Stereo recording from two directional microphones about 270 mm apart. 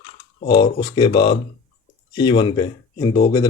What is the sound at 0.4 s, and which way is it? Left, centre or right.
Speech, centre.